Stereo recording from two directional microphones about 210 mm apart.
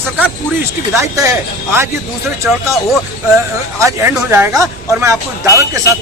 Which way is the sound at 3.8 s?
15° right (ahead or behind).